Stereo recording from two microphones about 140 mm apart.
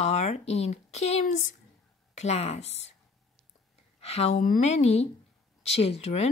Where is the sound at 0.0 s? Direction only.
50° left (ahead or behind).